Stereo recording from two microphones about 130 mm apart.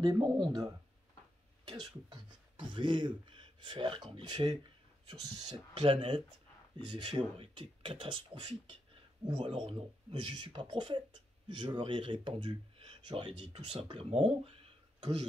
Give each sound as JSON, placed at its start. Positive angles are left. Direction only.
{"t": 0.0, "sound": "speech", "side_deg": -30}
{"t": 1.7, "sound": "speech", "side_deg": -35}